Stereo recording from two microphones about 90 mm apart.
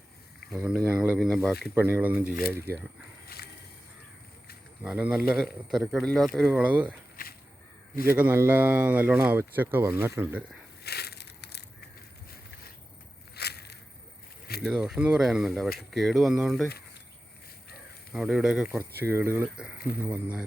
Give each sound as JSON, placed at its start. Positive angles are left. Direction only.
{"t": 0.5, "sound": "speech", "side_deg": -10}
{"t": 0.9, "sound": "a sound", "side_deg": -20}
{"t": 1.2, "sound": "speech", "side_deg": 0}
{"t": 1.7, "sound": "speech", "side_deg": -25}
{"t": 4.8, "sound": "speech", "side_deg": -15}
{"t": 6.0, "sound": "speech", "side_deg": 5}
{"t": 6.5, "sound": "speech", "side_deg": -20}
{"t": 8.0, "sound": "speech", "side_deg": -20}
{"t": 14.6, "sound": "speech", "side_deg": -5}
{"t": 18.1, "sound": "speech", "side_deg": -5}
{"t": 19.1, "sound": "speech", "side_deg": -30}
{"t": 19.5, "sound": "speech", "side_deg": -15}